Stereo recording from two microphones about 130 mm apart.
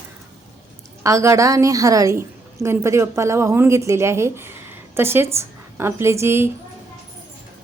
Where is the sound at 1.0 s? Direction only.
25° right (ahead or behind).